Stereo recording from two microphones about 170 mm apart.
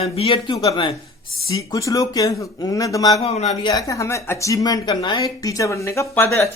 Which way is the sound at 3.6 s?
20° left (ahead or behind).